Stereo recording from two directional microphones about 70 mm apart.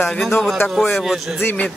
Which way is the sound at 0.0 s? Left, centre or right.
Centre.